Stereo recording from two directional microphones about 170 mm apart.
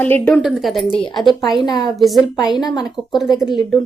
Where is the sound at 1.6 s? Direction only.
25° left (ahead or behind).